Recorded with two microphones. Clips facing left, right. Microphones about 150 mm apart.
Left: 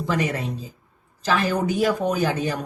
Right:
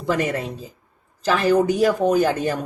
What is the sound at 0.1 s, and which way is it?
Speech, 50° right (ahead or behind).